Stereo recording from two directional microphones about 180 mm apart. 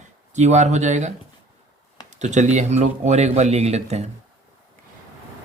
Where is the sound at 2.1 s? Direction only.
40° right (ahead or behind).